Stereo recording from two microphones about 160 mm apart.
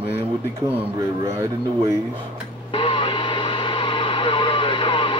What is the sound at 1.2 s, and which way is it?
Speech, 20° right (ahead or behind).